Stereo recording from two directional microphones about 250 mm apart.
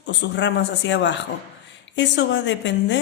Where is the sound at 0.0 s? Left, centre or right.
Left.